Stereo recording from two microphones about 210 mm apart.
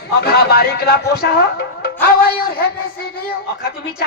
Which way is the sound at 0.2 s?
50° left (ahead or behind).